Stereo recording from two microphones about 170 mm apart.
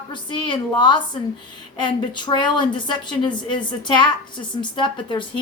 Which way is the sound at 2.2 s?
25° left (ahead or behind).